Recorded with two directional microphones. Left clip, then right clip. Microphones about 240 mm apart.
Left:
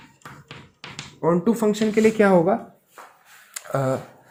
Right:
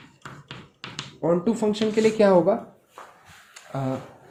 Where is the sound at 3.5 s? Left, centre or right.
Left.